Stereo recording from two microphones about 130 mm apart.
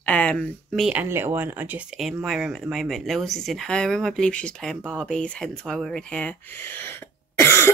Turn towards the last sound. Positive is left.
turn(degrees=20)  # may be behind; listen again after turning